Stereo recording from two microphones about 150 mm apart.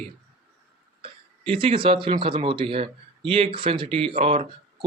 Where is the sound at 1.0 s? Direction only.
35° right (ahead or behind).